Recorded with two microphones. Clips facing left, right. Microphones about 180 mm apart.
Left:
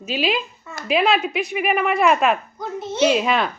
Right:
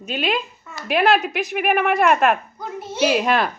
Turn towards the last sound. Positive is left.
turn(degrees=-5)  # may be behind; listen again after turning